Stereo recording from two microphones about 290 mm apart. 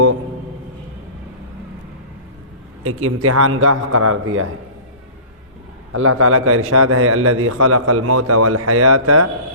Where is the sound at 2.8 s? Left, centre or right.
Right.